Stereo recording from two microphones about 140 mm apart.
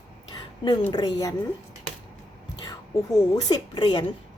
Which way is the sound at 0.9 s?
25° left (ahead or behind).